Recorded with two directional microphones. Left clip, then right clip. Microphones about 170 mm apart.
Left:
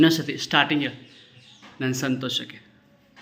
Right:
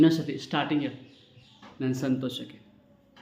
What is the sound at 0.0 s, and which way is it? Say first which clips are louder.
Speech: left 3 dB; 5° right (ahead or behind).